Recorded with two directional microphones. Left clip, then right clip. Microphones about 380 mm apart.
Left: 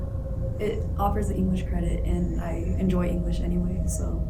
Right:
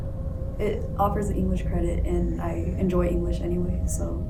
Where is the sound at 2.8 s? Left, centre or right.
Centre.